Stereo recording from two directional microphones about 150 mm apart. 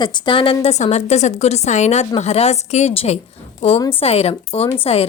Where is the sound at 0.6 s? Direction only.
45° left (ahead or behind).